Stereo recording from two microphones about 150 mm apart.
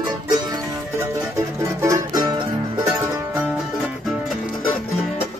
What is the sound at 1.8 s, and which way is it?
Music, 20° right (ahead or behind).